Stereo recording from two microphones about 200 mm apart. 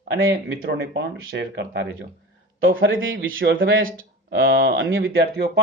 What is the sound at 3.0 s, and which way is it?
Speech, 75° right (ahead or behind).